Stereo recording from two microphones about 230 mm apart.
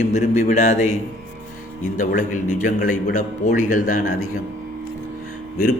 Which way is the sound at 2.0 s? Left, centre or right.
Left.